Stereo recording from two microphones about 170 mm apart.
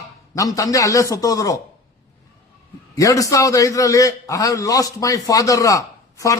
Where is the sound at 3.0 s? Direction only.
20° left (ahead or behind).